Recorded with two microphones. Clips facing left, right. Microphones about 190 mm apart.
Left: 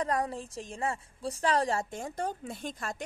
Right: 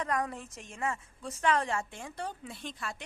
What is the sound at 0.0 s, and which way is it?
A woman's voice, 35° left (ahead or behind).